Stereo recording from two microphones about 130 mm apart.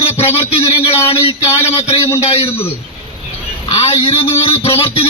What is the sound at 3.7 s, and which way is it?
A man's voice, 50° left (ahead or behind).